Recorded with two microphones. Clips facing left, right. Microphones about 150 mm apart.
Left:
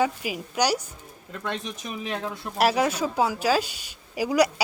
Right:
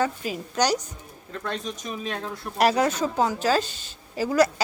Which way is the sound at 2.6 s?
5° left (ahead or behind).